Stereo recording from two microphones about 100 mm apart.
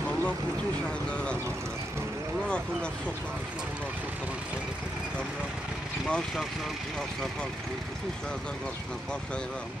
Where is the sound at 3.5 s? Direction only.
15° right (ahead or behind).